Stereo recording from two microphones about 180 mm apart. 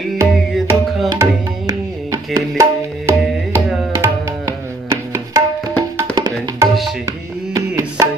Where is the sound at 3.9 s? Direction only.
15° right (ahead or behind).